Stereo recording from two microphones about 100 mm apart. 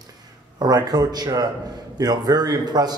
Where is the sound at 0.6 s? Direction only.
40° right (ahead or behind).